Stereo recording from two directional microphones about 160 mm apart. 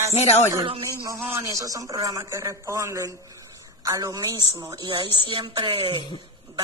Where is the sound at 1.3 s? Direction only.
20° right (ahead or behind).